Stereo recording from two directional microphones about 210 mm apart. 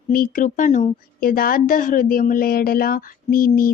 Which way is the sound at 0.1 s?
40° left (ahead or behind).